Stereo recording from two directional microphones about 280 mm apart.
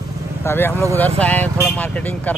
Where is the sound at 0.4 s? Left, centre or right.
Centre.